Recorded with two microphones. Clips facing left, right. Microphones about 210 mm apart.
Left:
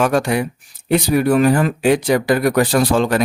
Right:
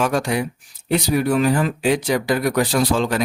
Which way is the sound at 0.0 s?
60° left (ahead or behind).